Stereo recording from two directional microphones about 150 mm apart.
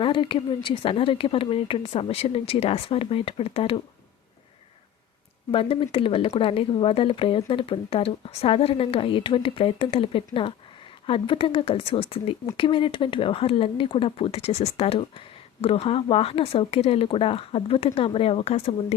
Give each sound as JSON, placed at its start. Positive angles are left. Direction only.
{"t": 0.0, "sound": "speech", "side_deg": 35}
{"t": 5.5, "sound": "speech", "side_deg": 40}